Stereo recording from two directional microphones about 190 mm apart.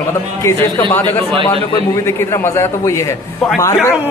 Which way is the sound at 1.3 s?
25° right (ahead or behind).